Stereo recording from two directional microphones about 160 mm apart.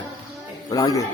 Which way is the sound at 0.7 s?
20° left (ahead or behind).